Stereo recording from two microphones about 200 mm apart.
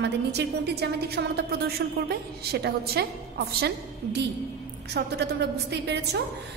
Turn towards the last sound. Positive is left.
turn(degrees=-55)  # may be behind; listen again after turning